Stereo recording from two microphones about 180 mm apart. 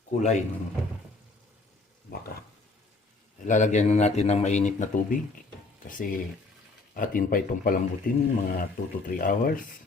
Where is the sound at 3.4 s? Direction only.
45° left (ahead or behind).